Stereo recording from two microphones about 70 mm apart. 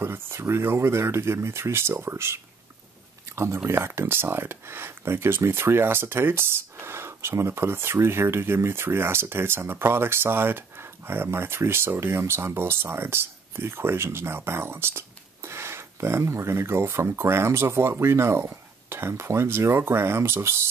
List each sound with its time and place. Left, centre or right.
0.0 s speech: right